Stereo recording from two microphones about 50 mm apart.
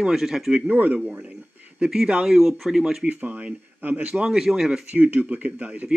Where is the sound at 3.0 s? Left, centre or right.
Right.